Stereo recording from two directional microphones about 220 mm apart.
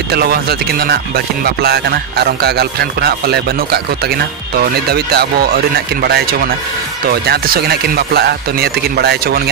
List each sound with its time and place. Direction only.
0.1 s speech: 45° right (ahead or behind)
4.6 s speech: 45° right (ahead or behind)
7.1 s speech: 45° right (ahead or behind)